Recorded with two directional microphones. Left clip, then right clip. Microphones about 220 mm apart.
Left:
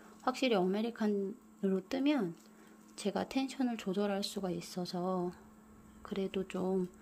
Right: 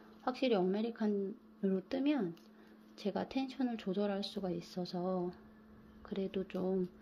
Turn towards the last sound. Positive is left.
turn(degrees=10)  # may be behind; listen again after turning